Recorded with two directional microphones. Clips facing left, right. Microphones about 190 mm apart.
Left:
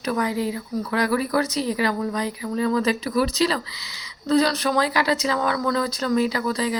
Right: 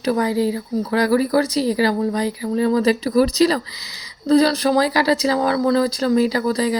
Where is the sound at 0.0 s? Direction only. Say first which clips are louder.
Right 5 dB; 35° right (ahead or behind).